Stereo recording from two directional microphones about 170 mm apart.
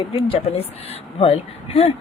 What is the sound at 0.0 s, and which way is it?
A woman's voice, 35° left (ahead or behind).